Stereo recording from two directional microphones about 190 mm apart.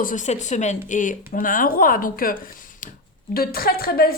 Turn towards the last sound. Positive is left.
turn(degrees=50)  # may be behind; listen again after turning